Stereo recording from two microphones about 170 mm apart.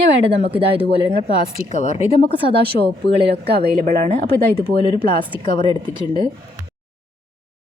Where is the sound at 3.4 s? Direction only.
70° right (ahead or behind).